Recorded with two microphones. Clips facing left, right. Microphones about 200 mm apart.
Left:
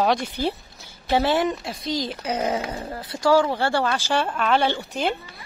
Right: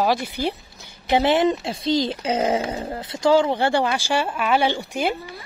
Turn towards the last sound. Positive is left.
turn(degrees=-10)  # may be behind; listen again after turning